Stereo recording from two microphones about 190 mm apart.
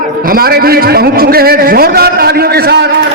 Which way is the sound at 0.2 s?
50° right (ahead or behind).